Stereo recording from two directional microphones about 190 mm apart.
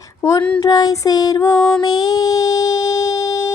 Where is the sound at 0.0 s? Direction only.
15° left (ahead or behind).